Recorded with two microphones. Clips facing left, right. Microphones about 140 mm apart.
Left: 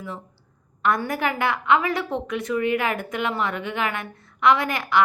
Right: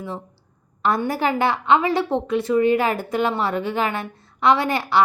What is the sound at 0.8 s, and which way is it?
A woman's voice, 30° right (ahead or behind).